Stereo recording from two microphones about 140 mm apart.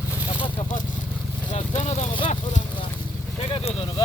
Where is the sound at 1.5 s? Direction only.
55° left (ahead or behind).